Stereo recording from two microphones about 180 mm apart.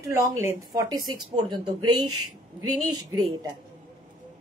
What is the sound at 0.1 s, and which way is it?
Speech, 15° right (ahead or behind).